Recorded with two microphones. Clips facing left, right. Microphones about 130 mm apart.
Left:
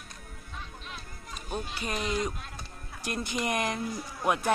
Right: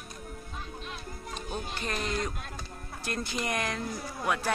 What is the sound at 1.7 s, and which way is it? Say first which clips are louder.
Speech: left 2 dB; 10° left (ahead or behind).